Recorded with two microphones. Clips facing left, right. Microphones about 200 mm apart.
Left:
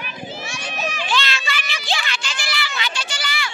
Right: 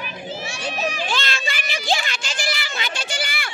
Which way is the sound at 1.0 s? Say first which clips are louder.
Left 2 dB; 45° right (ahead or behind).